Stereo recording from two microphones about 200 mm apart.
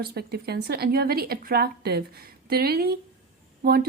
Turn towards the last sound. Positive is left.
turn(degrees=-50)  # may be behind; listen again after turning